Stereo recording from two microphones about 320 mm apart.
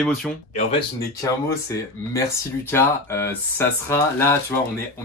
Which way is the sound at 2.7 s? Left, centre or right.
Centre.